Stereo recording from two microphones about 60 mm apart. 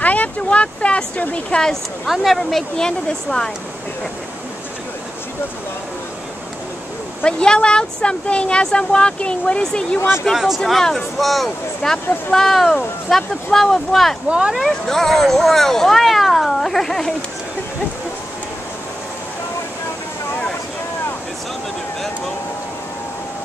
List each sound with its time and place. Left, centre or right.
0.0 s speech: left
2.0 s speech: centre
7.2 s speech: centre
9.9 s speech: left
10.6 s speech: centre